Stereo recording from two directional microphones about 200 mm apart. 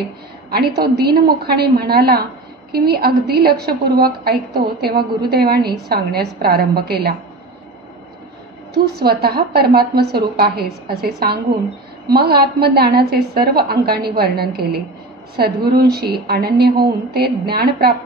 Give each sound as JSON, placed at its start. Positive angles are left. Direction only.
{"t": 0.5, "sound": "a woman's voice", "side_deg": -55}
{"t": 8.7, "sound": "a woman's voice", "side_deg": -50}